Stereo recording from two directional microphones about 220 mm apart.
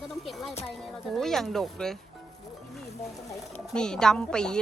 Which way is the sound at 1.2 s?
Centre (ahead or behind).